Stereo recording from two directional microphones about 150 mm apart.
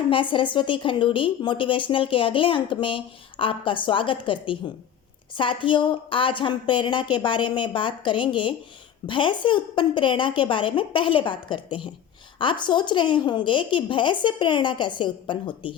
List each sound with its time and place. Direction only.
0.1 s a woman's voice: 35° left (ahead or behind)